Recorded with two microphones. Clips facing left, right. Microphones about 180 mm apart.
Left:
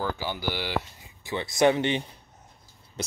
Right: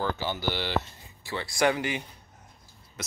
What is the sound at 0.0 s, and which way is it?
Speech, 10° left (ahead or behind).